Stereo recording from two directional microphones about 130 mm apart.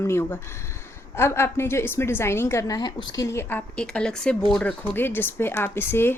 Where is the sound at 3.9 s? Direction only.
5° left (ahead or behind).